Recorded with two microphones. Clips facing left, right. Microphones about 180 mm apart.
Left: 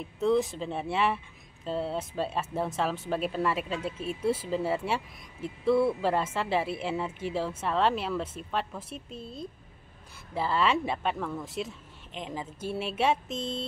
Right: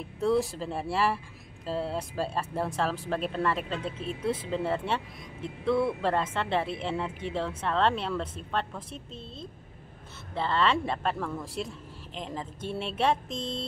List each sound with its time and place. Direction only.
0.2 s speech: centre (ahead or behind)
10.3 s speech: 5° left (ahead or behind)